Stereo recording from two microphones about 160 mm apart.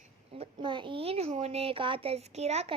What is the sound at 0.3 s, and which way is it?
Speech, 30° right (ahead or behind).